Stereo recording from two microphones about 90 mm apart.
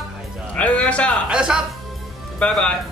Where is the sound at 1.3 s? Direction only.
10° right (ahead or behind).